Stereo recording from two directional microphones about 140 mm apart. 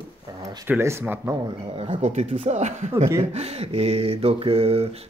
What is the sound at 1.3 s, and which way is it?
Speech, 30° right (ahead or behind).